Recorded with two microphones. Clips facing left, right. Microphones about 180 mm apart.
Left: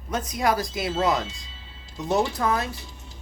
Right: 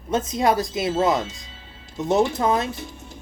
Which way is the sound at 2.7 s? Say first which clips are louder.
Right 7 dB; 50° right (ahead or behind).